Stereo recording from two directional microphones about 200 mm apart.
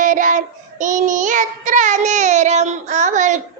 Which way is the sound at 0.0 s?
40° right (ahead or behind).